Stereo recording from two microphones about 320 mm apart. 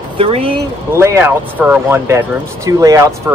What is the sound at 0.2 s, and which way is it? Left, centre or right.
Speech, centre.